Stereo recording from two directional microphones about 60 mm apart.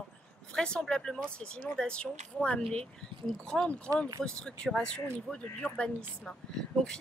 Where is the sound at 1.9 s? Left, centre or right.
Centre.